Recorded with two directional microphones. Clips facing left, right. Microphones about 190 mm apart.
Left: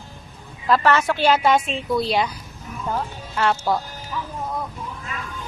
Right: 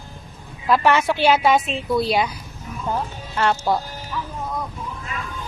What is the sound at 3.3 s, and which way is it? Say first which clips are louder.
Speech: right 1 dB; centre (ahead or behind).